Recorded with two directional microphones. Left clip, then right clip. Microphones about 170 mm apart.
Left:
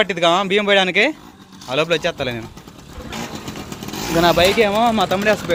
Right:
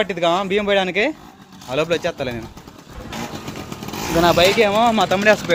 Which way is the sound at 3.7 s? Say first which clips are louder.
Even; 65° left (ahead or behind).